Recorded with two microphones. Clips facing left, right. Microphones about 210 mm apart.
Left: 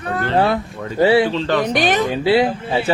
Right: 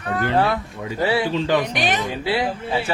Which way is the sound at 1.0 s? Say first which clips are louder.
Left 7 dB; 25° left (ahead or behind).